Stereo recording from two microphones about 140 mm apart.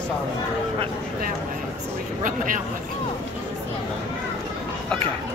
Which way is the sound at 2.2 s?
75° right (ahead or behind).